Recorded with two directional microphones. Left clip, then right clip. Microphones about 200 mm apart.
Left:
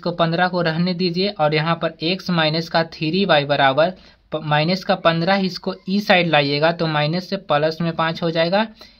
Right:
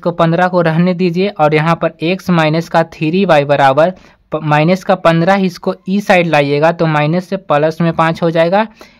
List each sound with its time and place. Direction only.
0.0 s speech: 30° right (ahead or behind)